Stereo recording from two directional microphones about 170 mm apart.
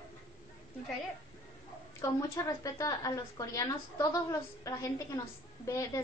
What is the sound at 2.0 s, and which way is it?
A woman's voice, 15° left (ahead or behind).